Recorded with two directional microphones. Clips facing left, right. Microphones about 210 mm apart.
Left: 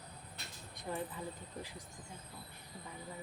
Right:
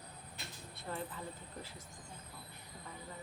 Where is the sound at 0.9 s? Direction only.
10° left (ahead or behind).